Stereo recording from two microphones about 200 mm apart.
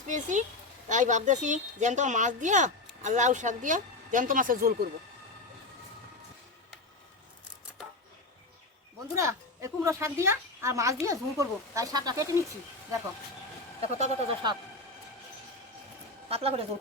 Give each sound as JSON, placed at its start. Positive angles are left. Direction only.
{"t": 0.1, "sound": "speech", "side_deg": -40}
{"t": 9.1, "sound": "a woman's voice", "side_deg": -15}
{"t": 13.8, "sound": "speech", "side_deg": -30}
{"t": 16.3, "sound": "speech", "side_deg": -30}